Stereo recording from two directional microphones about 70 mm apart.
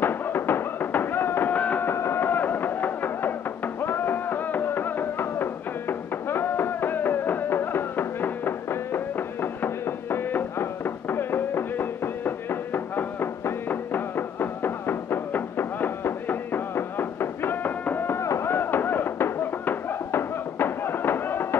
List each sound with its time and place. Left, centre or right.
0.0 s flamenco: left
1.5 s music: left
1.9 s a sound: left